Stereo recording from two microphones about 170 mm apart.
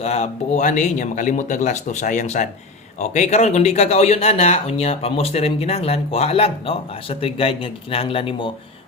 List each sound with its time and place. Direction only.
0.0 s speech: 40° left (ahead or behind)